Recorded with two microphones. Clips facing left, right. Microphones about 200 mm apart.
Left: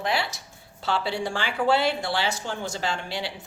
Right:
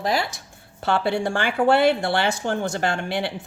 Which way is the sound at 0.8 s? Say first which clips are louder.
Right 5 dB; 55° right (ahead or behind).